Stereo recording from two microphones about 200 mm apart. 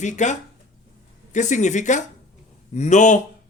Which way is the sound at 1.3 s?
35° left (ahead or behind).